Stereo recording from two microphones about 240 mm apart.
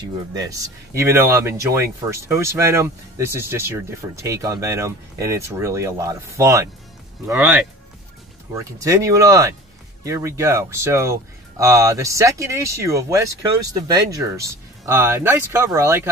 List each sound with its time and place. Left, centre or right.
0.0 s speech: centre